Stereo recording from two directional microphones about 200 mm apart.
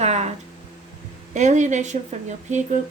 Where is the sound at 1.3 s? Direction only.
35° right (ahead or behind).